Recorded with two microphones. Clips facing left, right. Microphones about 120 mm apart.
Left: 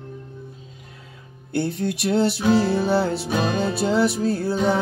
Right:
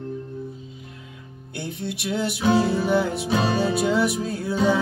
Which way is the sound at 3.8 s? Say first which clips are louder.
Left 2 dB; 30° left (ahead or behind).